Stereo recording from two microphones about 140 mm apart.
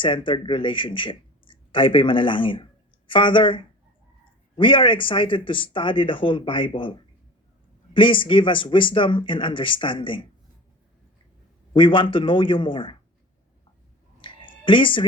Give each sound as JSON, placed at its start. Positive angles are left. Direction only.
{"t": 0.0, "sound": "speech", "side_deg": 35}
{"t": 11.7, "sound": "speech", "side_deg": 35}
{"t": 14.2, "sound": "a sound", "side_deg": 35}